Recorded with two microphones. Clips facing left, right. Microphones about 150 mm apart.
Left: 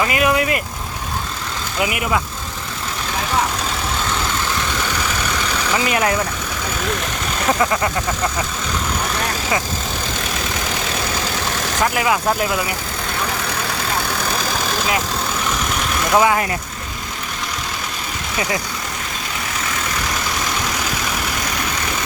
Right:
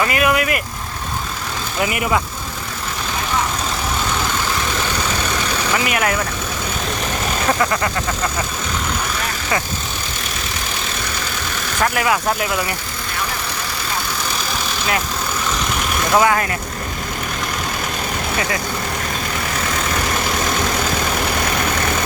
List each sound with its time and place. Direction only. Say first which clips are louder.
0.0 s vehicle: even; 20° left (ahead or behind)
1.8 s speech: right 1 dB; 5° left (ahead or behind)
5.7 s speech: left 2 dB; 25° left (ahead or behind)
11.9 s speech: right 1 dB; 20° left (ahead or behind)
16.1 s speech: even; 15° left (ahead or behind)